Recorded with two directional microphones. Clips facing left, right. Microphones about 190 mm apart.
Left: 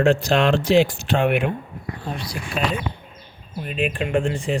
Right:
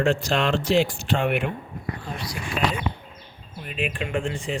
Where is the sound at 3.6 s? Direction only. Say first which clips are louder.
Left 5 dB; 35° left (ahead or behind).